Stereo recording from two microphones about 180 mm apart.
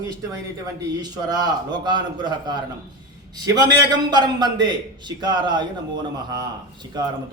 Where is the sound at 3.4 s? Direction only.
20° right (ahead or behind).